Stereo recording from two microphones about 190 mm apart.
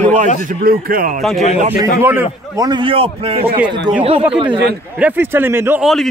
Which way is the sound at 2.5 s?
20° right (ahead or behind).